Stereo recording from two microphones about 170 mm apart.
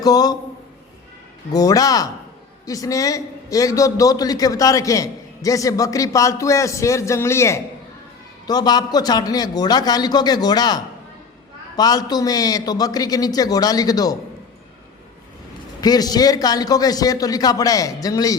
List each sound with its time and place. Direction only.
0.0 s a man's voice: 25° left (ahead or behind)
1.5 s a man's voice: 20° left (ahead or behind)
11.8 s a man's voice: 25° left (ahead or behind)
15.8 s a man's voice: 25° left (ahead or behind)